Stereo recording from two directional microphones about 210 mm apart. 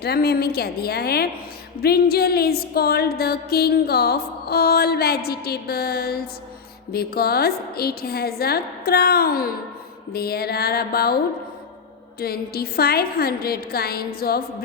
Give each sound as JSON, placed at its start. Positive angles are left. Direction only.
{"t": 0.0, "sound": "music", "side_deg": 50}
{"t": 12.2, "sound": "music", "side_deg": 45}